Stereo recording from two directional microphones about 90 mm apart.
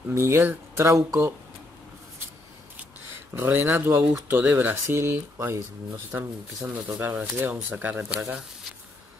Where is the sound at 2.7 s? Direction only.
25° right (ahead or behind).